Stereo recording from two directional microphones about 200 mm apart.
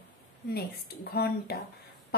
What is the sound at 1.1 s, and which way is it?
Speech, 50° left (ahead or behind).